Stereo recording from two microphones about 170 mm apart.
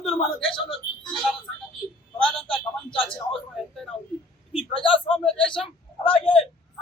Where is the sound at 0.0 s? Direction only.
Centre (ahead or behind).